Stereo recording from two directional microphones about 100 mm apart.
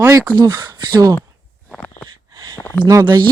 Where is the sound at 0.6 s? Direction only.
40° right (ahead or behind).